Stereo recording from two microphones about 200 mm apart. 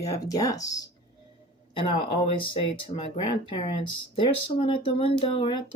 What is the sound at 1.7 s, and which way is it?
Speech, 30° left (ahead or behind).